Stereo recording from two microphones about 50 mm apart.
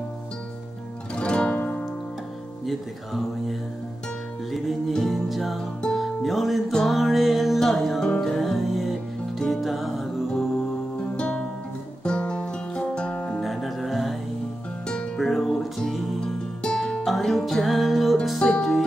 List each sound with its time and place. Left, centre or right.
1.1 s music: left
1.6 s music: left
2.6 s music: centre
11.1 s music: left
13.4 s music: centre
15.1 s music: centre
17.0 s music: centre